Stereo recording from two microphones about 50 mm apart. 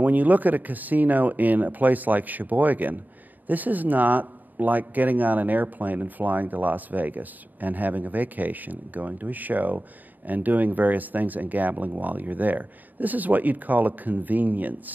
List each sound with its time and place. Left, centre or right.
0.0 s a man's voice: right